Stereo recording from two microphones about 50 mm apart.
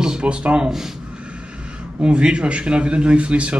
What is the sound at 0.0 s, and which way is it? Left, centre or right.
Speech, centre.